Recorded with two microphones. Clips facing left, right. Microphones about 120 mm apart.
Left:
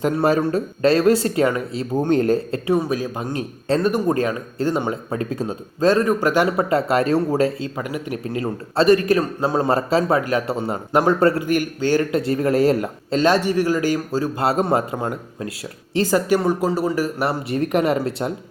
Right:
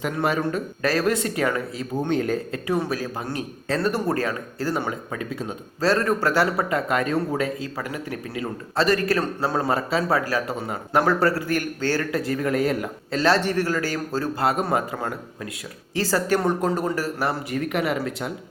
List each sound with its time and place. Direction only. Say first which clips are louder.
0.0 s speech: left 6 dB; 35° left (ahead or behind)
2.6 s speech: left 4 dB; 20° left (ahead or behind)
5.1 s speech: left 6 dB; 40° left (ahead or behind)
5.8 s speech: left 4 dB; 15° left (ahead or behind)
6.7 s speech: left 5 dB; 30° left (ahead or behind)
7.8 s speech: left 4 dB; 15° left (ahead or behind)
9.6 s speech: left 5 dB; 40° left (ahead or behind)
10.1 s speech: left 4 dB; 20° left (ahead or behind)
14.4 s speech: left 3 dB; 25° left (ahead or behind)
16.4 s speech: left 3 dB; 5° left (ahead or behind)
17.5 s speech: left 5 dB; 35° left (ahead or behind)